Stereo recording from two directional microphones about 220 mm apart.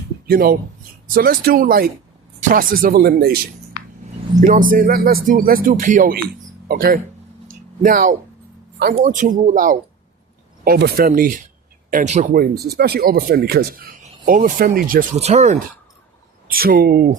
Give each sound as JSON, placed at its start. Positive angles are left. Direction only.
{"t": 0.3, "sound": "speech", "side_deg": -40}
{"t": 16.5, "sound": "speech", "side_deg": -40}